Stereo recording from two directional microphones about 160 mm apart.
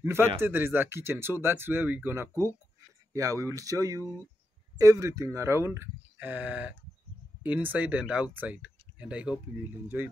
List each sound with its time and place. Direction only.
0.0 s speech: 15° right (ahead or behind)